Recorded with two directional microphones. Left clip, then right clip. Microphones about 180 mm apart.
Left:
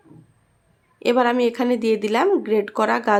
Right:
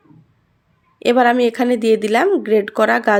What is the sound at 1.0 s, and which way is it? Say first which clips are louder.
A woman's voice: right 5 dB; 15° right (ahead or behind).